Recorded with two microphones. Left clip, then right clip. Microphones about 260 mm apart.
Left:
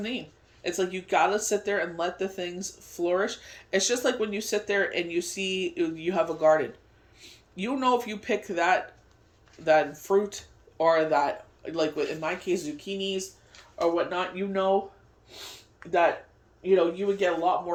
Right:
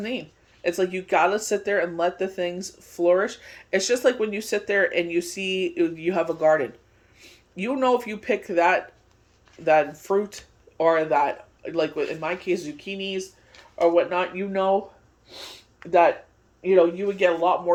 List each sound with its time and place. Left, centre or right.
0.0 s a sound: centre
0.8 s speech: centre
10.0 s speech: centre
13.7 s speech: right
15.8 s speech: right
16.7 s speech: centre